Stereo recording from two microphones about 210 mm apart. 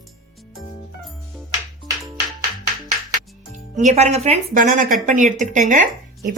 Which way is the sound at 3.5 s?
35° right (ahead or behind).